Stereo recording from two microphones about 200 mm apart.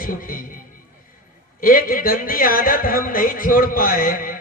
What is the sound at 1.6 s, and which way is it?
A man's voice, 45° left (ahead or behind).